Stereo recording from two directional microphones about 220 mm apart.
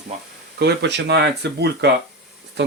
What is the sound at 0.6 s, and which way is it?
Speech, 50° right (ahead or behind).